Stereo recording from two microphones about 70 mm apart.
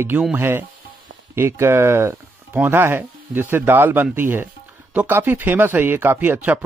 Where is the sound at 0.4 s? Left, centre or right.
Right.